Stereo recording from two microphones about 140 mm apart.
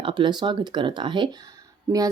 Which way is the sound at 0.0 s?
35° right (ahead or behind).